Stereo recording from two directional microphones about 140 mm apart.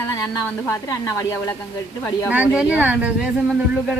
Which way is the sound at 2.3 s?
10° right (ahead or behind).